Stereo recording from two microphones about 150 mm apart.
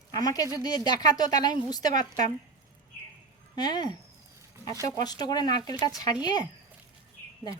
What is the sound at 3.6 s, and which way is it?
Speech, 30° left (ahead or behind).